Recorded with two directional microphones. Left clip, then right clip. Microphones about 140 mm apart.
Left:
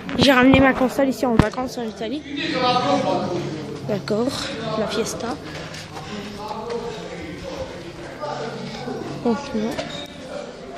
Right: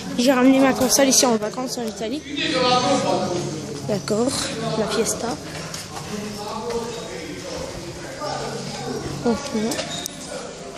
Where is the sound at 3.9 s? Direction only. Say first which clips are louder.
Right 1 dB; centre (ahead or behind).